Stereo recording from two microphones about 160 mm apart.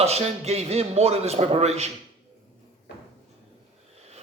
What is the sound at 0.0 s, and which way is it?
A man's voice, 40° right (ahead or behind).